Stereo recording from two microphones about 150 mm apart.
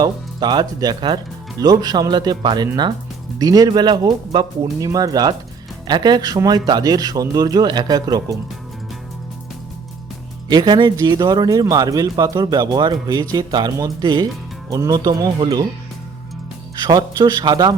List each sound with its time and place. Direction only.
0.0 s speech: 30° right (ahead or behind)
10.5 s speech: 30° right (ahead or behind)
16.8 s speech: 30° right (ahead or behind)